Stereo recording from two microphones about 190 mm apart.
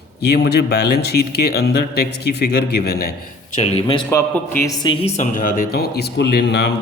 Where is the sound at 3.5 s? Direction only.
35° left (ahead or behind).